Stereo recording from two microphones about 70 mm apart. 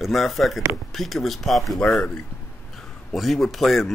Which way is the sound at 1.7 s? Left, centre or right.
Centre.